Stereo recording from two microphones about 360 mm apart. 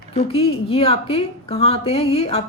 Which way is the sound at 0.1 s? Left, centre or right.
Centre.